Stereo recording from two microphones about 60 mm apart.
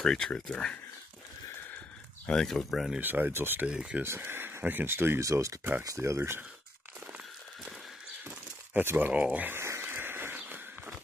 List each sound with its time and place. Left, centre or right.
0.0 s speech: centre
2.2 s speech: centre
3.0 s speech: right
3.6 s speech: centre
4.0 s speech: right
5.2 s speech: right
5.6 s speech: right
5.9 s speech: right
8.2 s a sound: right
8.8 s speech: right
9.5 s a sound: right
10.3 s walk: right